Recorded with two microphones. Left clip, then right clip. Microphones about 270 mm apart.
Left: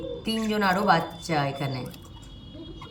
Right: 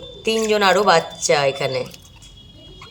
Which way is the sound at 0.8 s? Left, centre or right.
Right.